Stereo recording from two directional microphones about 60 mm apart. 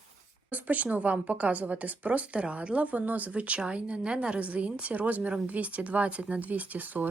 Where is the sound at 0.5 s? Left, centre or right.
Right.